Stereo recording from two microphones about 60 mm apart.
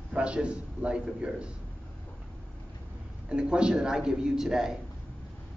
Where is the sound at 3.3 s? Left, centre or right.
Centre.